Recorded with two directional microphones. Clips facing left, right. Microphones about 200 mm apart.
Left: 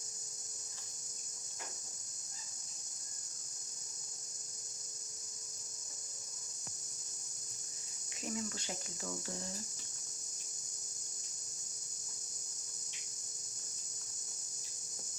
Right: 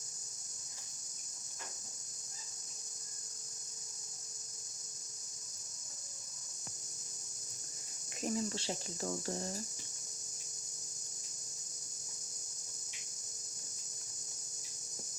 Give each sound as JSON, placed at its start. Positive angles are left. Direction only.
{"t": 8.2, "sound": "speech", "side_deg": -35}